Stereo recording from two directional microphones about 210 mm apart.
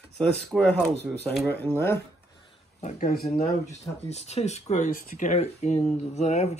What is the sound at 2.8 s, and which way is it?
Speech, 35° left (ahead or behind).